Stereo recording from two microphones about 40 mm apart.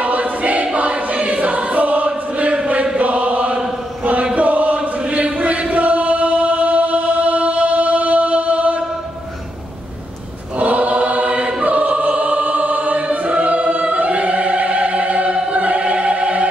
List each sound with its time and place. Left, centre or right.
0.0 s choir: right
3.0 s chant: right
4.4 s choir: right
10.6 s choir: right
15.5 s opera: right